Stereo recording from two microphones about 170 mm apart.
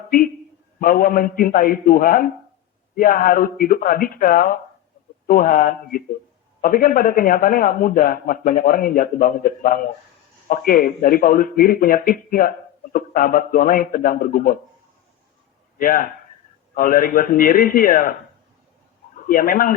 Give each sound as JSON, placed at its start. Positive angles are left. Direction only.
{"t": 0.8, "sound": "speech", "side_deg": 55}
{"t": 15.8, "sound": "speech", "side_deg": 55}
{"t": 19.1, "sound": "speech", "side_deg": 55}